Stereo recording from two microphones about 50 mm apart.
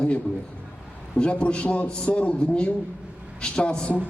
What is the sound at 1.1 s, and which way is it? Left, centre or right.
A man's voice, left.